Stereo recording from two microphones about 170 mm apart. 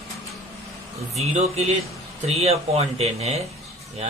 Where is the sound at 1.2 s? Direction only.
40° right (ahead or behind).